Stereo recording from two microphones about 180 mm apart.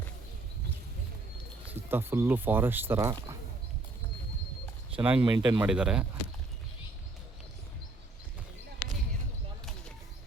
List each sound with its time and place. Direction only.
1.7 s speech: 10° right (ahead or behind)
4.9 s speech: 10° right (ahead or behind)
5.2 s speech: 25° right (ahead or behind)
5.5 s speech: 5° right (ahead or behind)